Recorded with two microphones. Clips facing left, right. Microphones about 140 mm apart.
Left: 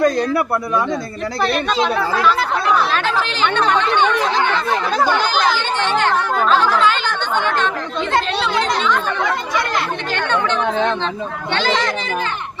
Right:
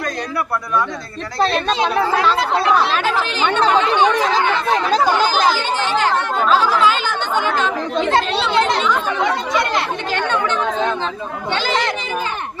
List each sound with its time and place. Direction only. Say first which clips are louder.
0.0 s a man's voice: left 8 dB; 25° left (ahead or behind)
1.4 s speech: right 1 dB; 30° right (ahead or behind)
5.0 s speech: right 1 dB; 40° right (ahead or behind)
5.5 s speech: even; 5° right (ahead or behind)
7.9 s speech: right 3 dB; 30° right (ahead or behind)
10.2 s speech: left 1 dB; 5° right (ahead or behind)